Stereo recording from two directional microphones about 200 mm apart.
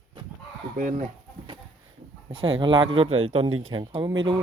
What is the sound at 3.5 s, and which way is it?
Speech, 90° right.